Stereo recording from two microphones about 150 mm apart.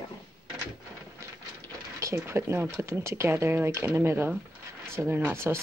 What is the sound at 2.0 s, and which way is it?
Speech, 15° right (ahead or behind).